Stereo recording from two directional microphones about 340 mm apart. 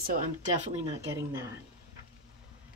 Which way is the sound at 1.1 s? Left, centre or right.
Centre.